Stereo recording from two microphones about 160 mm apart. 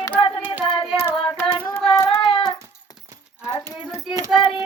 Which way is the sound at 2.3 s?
35° left (ahead or behind).